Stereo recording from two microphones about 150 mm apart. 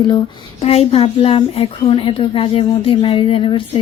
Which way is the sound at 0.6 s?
45° left (ahead or behind).